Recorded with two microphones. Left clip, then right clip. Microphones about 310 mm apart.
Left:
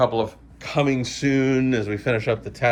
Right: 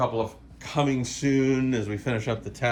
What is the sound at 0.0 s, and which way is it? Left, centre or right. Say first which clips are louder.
Speech: left 6 dB; centre.